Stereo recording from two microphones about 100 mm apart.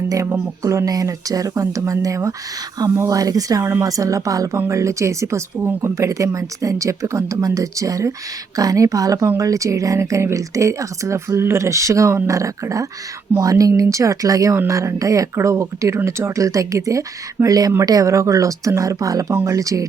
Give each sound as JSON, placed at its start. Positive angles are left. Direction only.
{"t": 0.1, "sound": "speech", "side_deg": -30}